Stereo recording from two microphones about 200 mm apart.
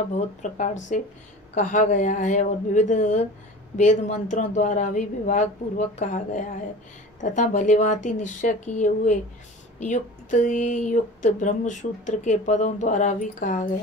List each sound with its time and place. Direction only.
0.1 s speech: 40° left (ahead or behind)